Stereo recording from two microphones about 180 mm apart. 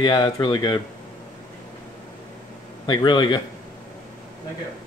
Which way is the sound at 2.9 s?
25° left (ahead or behind).